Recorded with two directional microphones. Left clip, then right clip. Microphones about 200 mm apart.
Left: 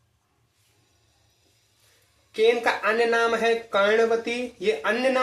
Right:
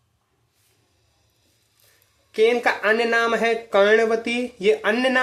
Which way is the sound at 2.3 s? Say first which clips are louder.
Right 2 dB; 55° right (ahead or behind).